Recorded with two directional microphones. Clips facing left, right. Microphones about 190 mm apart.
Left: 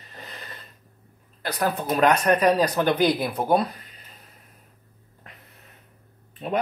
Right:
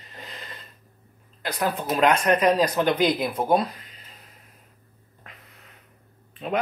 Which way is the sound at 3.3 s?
5° right (ahead or behind).